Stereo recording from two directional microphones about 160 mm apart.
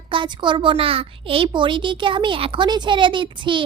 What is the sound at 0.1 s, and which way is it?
A child's voice, 30° right (ahead or behind).